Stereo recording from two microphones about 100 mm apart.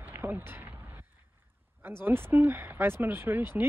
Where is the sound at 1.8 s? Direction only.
20° right (ahead or behind).